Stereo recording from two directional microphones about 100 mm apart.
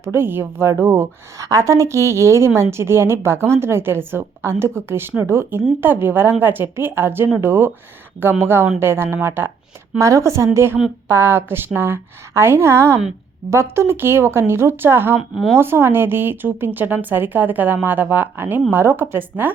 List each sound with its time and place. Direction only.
0.0 s a woman's voice: 25° right (ahead or behind)